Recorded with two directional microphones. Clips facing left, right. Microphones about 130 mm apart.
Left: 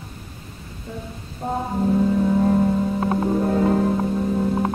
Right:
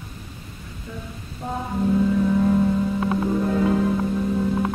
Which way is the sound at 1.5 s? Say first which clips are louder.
Left 1 dB; 40° left (ahead or behind).